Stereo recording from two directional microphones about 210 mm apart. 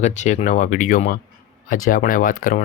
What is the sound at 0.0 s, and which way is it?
Speech, 35° left (ahead or behind).